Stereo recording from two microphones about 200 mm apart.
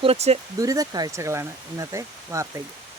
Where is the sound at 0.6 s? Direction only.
15° right (ahead or behind).